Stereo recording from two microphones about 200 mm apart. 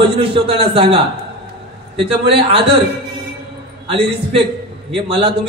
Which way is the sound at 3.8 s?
30° right (ahead or behind).